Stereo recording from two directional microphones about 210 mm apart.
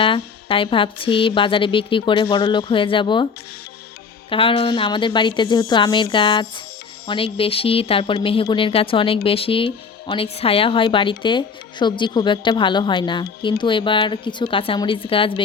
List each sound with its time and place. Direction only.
0.0 s speech: 25° left (ahead or behind)
4.3 s speech: 25° left (ahead or behind)